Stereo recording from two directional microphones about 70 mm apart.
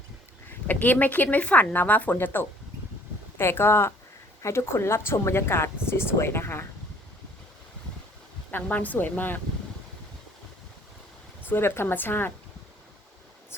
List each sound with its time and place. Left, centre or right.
0.7 s speech: left
8.4 s speech: left
11.4 s speech: left
13.5 s speech: left